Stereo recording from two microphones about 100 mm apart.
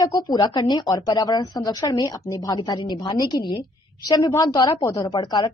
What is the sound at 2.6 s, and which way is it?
A woman's voice, 50° left (ahead or behind).